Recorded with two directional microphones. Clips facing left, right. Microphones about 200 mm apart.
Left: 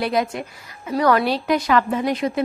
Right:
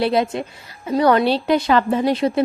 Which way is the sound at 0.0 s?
25° right (ahead or behind).